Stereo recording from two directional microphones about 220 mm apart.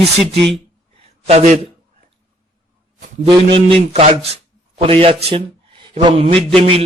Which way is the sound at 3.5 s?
25° right (ahead or behind).